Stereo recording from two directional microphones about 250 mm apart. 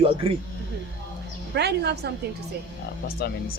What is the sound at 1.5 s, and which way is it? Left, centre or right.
Speech, right.